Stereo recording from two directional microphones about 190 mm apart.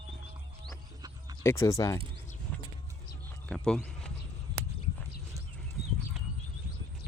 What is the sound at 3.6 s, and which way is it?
Speech, 5° left (ahead or behind).